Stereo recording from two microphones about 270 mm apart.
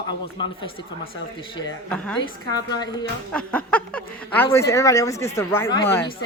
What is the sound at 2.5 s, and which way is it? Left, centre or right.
Speech, centre.